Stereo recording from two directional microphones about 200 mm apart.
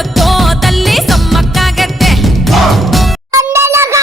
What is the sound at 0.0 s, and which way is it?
Music, centre (ahead or behind).